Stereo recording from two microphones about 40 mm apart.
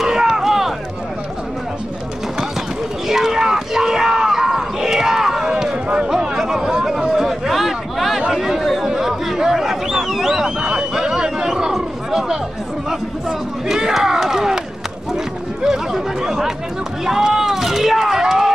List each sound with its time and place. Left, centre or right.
0.0 s a sound: centre
3.1 s crowd: centre
6.0 s chatter: centre
8.9 s a sound: centre
13.3 s crowd: centre
15.6 s chatter: centre
17.0 s run: centre